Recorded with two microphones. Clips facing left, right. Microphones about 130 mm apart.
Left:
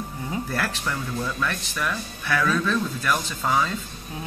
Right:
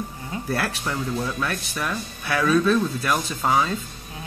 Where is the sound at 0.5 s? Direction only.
15° right (ahead or behind).